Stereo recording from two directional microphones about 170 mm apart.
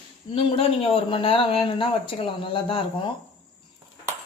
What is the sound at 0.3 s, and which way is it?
Speech, 35° left (ahead or behind).